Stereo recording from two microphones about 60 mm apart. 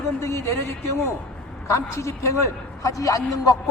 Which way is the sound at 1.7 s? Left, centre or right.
Left.